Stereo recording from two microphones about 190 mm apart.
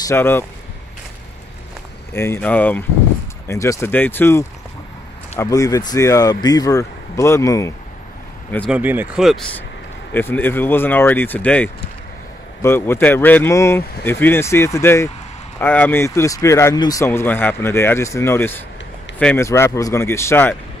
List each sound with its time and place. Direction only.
0.0 s speech: 10° left (ahead or behind)
2.1 s speech: 15° left (ahead or behind)
8.6 s speech: 10° right (ahead or behind)
10.1 s speech: 10° left (ahead or behind)